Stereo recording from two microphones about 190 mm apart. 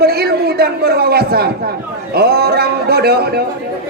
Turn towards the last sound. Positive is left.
turn(degrees=-55)  # may be behind; listen again after turning